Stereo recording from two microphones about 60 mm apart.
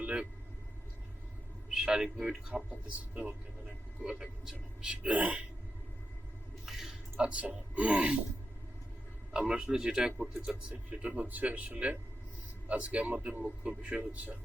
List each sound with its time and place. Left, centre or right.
0.0 s vehicle: centre
1.7 s a man's voice: centre
4.0 s a man's voice: centre
6.7 s squish: centre
7.2 s speech: right
9.3 s a man's voice: centre